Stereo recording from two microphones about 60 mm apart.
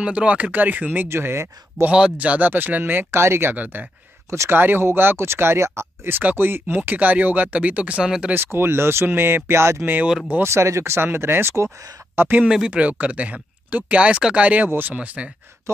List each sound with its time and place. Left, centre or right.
0.0 s speech: centre
1.0 s speech: right
1.9 s speech: centre; by 3.5 s right
3.5 s speech: right
4.3 s speech: right
4.6 s speech: right
6.1 s speech: right
8.4 s speech: right
12.2 s speech: right
12.4 s speech: centre